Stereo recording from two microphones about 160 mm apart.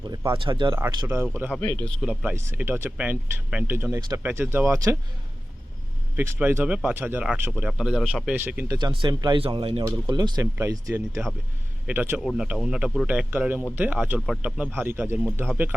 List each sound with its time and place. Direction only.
0.1 s speech: 25° right (ahead or behind)
1.0 s speech: 10° right (ahead or behind)
1.5 s speech: 10° left (ahead or behind)
2.0 s speech: 5° right (ahead or behind)
2.3 s speech: 15° right (ahead or behind)
6.1 s speech: 15° right (ahead or behind)
7.7 s speech: centre (ahead or behind); by 11.0 s 20° right (ahead or behind)
11.1 s speech: centre (ahead or behind)
11.9 s speech: 10° right (ahead or behind)